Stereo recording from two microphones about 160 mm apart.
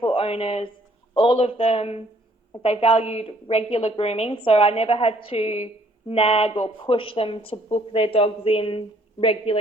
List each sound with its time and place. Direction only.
0.0 s a woman's voice: 35° left (ahead or behind)